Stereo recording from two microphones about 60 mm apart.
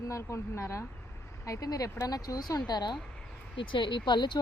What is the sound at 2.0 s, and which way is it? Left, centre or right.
Speech, left.